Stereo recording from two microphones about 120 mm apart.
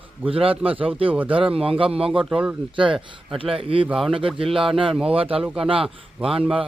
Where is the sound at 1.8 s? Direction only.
50° right (ahead or behind).